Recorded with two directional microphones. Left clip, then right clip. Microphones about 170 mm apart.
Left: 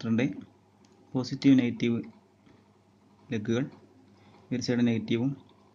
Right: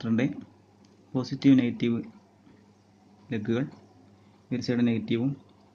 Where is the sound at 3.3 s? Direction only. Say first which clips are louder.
Right 1 dB; 5° left (ahead or behind).